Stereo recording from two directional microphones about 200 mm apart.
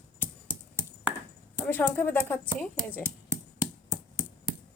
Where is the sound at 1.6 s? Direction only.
10° left (ahead or behind).